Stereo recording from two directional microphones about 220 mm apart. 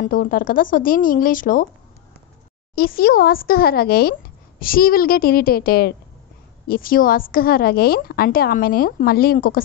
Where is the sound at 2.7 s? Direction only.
40° left (ahead or behind).